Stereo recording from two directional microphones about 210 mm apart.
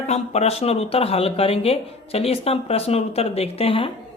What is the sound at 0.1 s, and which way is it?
Speech, 30° left (ahead or behind).